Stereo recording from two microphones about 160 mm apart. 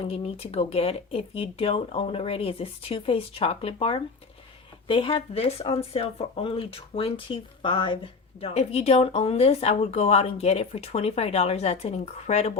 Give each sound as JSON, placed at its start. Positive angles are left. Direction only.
{"t": 0.0, "sound": "speech", "side_deg": 40}